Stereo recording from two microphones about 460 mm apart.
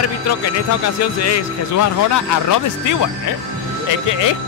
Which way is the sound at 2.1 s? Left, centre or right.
Left.